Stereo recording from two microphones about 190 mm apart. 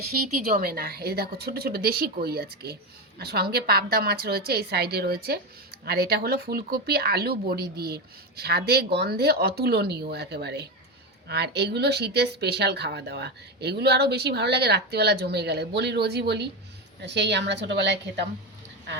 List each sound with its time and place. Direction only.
0.5 s a woman's voice: 50° right (ahead or behind); by 18.3 s 65° right (ahead or behind)